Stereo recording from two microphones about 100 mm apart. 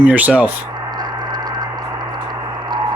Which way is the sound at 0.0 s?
15° right (ahead or behind).